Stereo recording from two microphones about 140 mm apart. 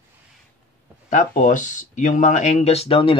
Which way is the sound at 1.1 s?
65° left (ahead or behind).